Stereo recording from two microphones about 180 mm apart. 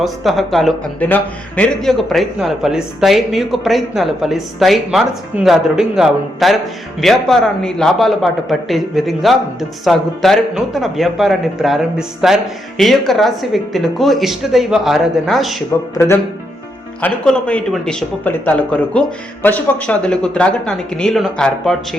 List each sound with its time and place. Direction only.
0.0 s a man's voice: centre (ahead or behind)
17.0 s a man's voice: 5° left (ahead or behind)